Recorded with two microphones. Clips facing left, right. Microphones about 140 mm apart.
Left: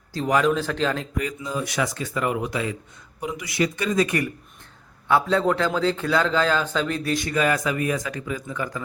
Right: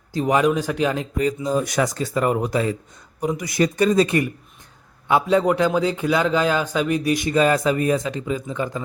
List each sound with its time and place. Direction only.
0.1 s a man's voice: 20° right (ahead or behind)
1.1 s speech: 30° right (ahead or behind)
5.0 s a man's voice: 15° right (ahead or behind)
7.3 s speech: 30° right (ahead or behind)